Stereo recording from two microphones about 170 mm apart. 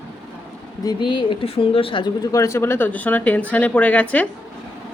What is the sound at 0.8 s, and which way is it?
A woman's voice, 25° left (ahead or behind).